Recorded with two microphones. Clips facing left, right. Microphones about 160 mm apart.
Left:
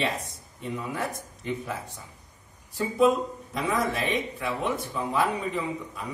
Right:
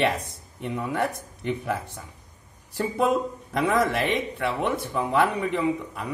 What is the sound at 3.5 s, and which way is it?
Speech, 65° right (ahead or behind).